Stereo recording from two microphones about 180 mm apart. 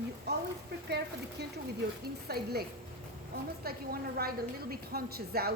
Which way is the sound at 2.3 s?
60° right (ahead or behind).